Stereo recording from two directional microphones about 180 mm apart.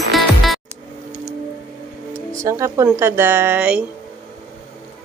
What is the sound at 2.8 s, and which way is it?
Speech, 15° right (ahead or behind).